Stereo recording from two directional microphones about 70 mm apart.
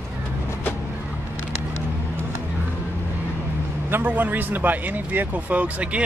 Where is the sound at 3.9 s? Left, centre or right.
Right.